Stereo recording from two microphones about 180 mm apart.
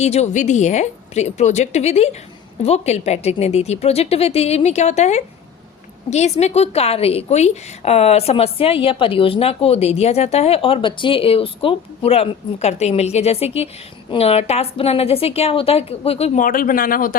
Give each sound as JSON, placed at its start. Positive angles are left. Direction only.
{"t": 0.0, "sound": "a woman's voice", "side_deg": 40}